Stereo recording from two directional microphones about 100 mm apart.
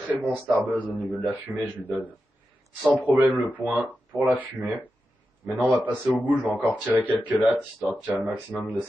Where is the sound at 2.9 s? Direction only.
20° right (ahead or behind).